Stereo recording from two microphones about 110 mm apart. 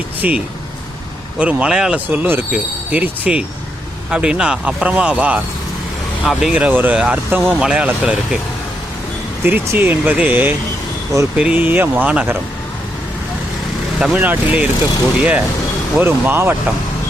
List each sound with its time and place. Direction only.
0.2 s speech: 15° right (ahead or behind)
2.0 s speech: 20° right (ahead or behind)
9.4 s speech: 15° right (ahead or behind)
14.0 s speech: 15° right (ahead or behind)